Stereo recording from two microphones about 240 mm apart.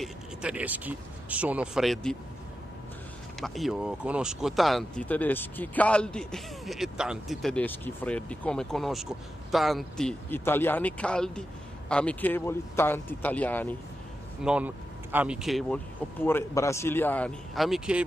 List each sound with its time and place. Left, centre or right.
0.0 s speech: centre
3.3 s speech: centre
14.4 s speech: centre